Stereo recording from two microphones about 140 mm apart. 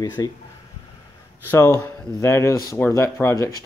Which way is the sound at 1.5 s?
20° left (ahead or behind).